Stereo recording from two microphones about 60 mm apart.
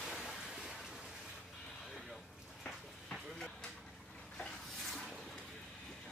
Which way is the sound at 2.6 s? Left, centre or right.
Centre.